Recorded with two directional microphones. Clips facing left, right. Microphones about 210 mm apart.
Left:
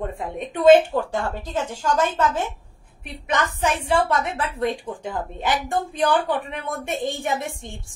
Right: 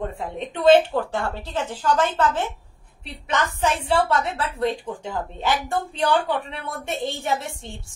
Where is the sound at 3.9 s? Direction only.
15° left (ahead or behind).